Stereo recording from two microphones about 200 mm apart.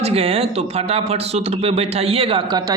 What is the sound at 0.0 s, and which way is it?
Speech, 30° right (ahead or behind).